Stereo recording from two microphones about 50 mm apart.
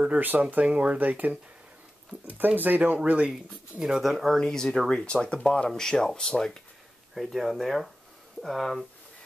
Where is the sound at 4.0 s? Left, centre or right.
Centre.